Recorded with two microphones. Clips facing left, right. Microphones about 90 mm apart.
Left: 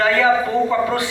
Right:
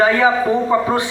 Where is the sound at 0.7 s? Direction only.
20° right (ahead or behind).